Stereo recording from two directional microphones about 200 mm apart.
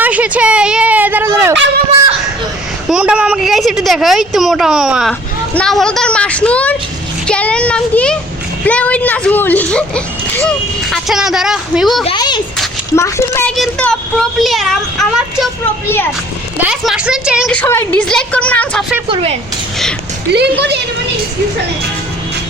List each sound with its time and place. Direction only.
0.0 s speech: 5° right (ahead or behind)
2.9 s a woman's voice: 5° right (ahead or behind)
12.0 s speech: 20° left (ahead or behind); by 15.4 s centre (ahead or behind)
16.6 s a woman's voice: 5° right (ahead or behind)
17.5 s speech: 10° left (ahead or behind)
19.0 s speech: 25° right (ahead or behind)
20.6 s a woman's voice: 55° right (ahead or behind)